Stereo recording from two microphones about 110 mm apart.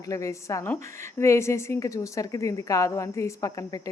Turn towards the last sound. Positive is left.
turn(degrees=30)  # may be behind; listen again after turning